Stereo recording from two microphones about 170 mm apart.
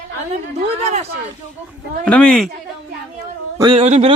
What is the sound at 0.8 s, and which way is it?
Speech, 40° right (ahead or behind).